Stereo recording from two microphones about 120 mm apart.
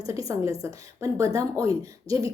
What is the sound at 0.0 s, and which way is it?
A woman's voice, 30° right (ahead or behind).